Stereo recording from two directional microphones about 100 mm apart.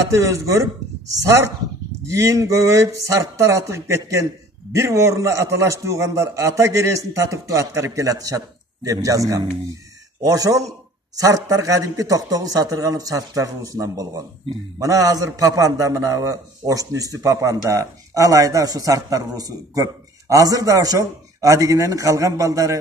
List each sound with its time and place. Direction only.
0.1 s a man's voice: 35° right (ahead or behind)